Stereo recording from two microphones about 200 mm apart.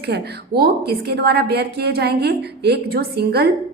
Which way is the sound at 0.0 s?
50° right (ahead or behind).